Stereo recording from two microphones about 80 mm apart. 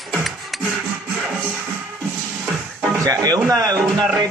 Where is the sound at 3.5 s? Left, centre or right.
Right.